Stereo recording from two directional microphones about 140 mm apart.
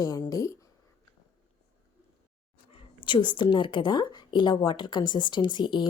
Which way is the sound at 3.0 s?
35° left (ahead or behind).